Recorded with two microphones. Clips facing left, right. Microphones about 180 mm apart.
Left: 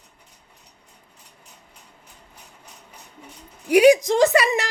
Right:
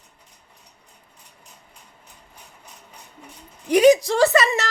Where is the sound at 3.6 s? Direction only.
10° left (ahead or behind).